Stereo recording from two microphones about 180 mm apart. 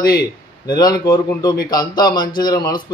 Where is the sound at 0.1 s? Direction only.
20° left (ahead or behind).